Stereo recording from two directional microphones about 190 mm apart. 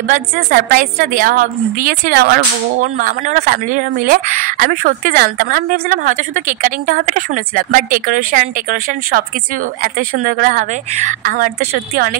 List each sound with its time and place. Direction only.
0.0 s a woman's voice: 45° right (ahead or behind)